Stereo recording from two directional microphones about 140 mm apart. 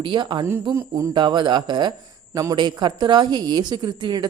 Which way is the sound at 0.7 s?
20° right (ahead or behind).